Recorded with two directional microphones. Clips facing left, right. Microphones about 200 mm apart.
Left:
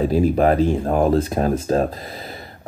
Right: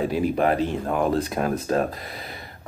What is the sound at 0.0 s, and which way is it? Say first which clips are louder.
Speech: left 5 dB; 35° left (ahead or behind).